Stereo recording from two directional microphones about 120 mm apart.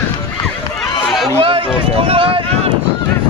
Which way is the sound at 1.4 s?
50° right (ahead or behind).